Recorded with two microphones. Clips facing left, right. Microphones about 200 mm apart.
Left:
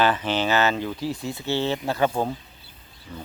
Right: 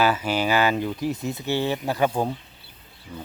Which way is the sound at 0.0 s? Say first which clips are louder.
Even; 10° right (ahead or behind).